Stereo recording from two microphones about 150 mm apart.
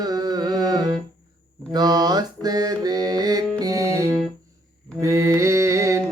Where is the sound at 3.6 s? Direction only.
20° right (ahead or behind).